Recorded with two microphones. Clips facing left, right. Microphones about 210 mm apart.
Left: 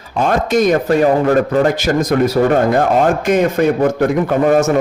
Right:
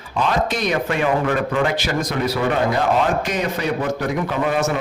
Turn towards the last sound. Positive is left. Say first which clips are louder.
# left 8 dB
turn(degrees=45)  # may be behind; listen again after turning